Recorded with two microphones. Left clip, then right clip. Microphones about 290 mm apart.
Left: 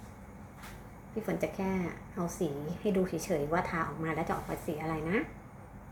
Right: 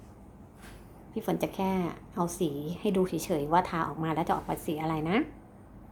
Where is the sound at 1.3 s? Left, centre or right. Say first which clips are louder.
Right 3 dB; right.